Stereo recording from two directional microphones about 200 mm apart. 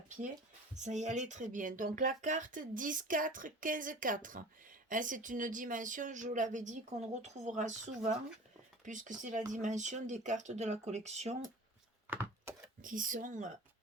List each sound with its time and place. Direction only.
0.8 s speech: 35° right (ahead or behind)
12.8 s speech: 40° right (ahead or behind)